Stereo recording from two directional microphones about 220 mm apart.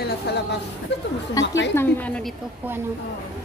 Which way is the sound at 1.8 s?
5° left (ahead or behind).